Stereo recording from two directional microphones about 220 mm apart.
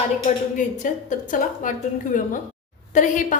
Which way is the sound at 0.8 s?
35° left (ahead or behind).